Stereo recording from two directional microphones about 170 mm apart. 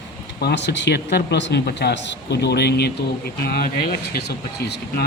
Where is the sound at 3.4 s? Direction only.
60° left (ahead or behind); by 4.8 s 80° left.